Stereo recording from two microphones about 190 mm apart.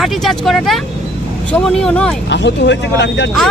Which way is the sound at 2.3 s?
65° left (ahead or behind).